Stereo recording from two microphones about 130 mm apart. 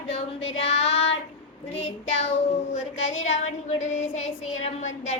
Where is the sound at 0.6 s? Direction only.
50° left (ahead or behind).